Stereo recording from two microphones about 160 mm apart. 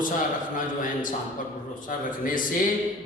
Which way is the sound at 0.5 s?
55° left (ahead or behind).